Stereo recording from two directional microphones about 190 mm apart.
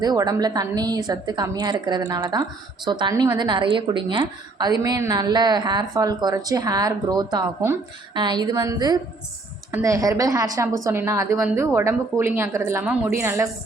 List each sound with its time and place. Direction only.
0.0 s a woman's voice: 20° right (ahead or behind)